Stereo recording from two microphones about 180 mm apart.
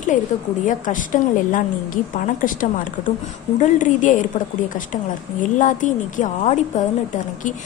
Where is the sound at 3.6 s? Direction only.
45° left (ahead or behind).